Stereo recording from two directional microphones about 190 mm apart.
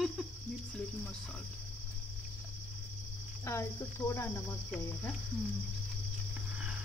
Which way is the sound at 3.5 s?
15° left (ahead or behind).